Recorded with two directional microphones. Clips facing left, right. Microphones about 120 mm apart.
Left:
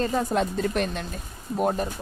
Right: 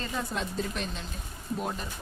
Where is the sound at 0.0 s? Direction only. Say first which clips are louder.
Left 9 dB; 45° left (ahead or behind).